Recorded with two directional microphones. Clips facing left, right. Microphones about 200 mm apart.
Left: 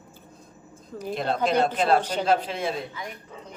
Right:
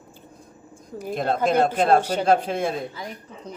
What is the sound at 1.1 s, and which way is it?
Speech, 50° right (ahead or behind).